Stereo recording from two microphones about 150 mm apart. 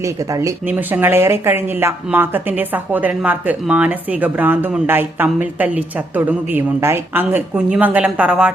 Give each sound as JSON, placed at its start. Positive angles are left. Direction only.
{"t": 0.0, "sound": "speech", "side_deg": -20}